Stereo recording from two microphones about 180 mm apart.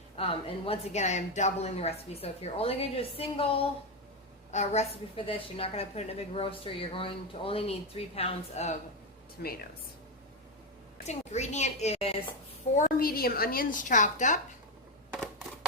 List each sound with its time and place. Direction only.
0.2 s a woman's voice: 30° left (ahead or behind)
9.4 s speech: 55° left (ahead or behind)
11.0 s a woman's voice: 40° left (ahead or behind)
12.7 s a woman's voice: 50° left (ahead or behind)
15.1 s a sound: 5° left (ahead or behind)